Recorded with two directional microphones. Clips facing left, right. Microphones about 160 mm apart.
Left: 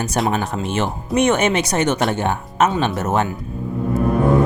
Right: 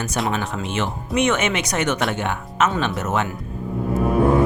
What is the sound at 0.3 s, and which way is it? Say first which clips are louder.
Speech: left 3 dB; 40° left (ahead or behind).